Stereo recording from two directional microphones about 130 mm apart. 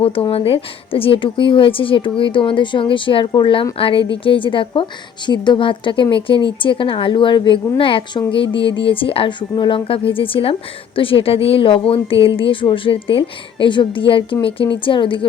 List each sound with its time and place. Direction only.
0.0 s a woman's voice: 45° left (ahead or behind)